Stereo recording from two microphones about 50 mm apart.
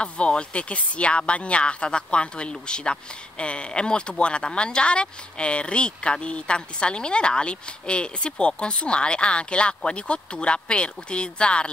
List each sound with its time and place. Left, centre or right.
0.0 s speech: left